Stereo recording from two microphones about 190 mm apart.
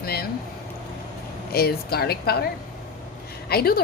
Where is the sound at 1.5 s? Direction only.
55° left (ahead or behind).